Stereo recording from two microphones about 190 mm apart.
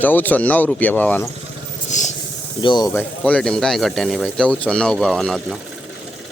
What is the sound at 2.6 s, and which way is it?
Speech, 25° left (ahead or behind).